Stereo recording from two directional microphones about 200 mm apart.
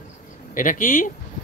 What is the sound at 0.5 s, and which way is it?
Speech, 40° left (ahead or behind).